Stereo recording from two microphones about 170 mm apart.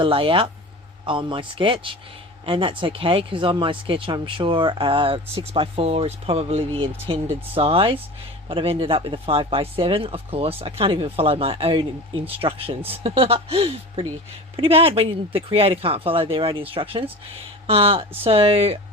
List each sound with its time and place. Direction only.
0.0 s speech: 30° right (ahead or behind)